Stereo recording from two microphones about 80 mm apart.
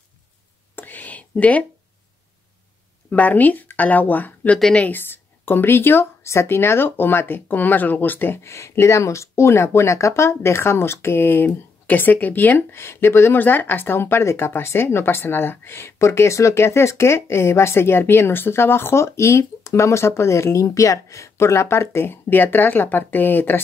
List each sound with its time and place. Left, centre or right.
0.7 s whispering: left
3.1 s speech: left
4.6 s speech: centre
4.8 s speech: left